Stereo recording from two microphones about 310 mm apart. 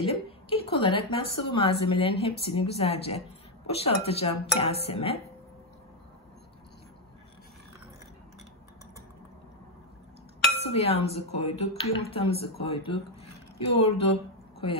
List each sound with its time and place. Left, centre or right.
0.0 s a woman's voice: centre
10.7 s a woman's voice: centre